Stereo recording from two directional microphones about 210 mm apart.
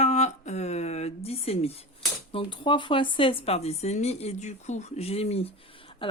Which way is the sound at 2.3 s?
25° left (ahead or behind).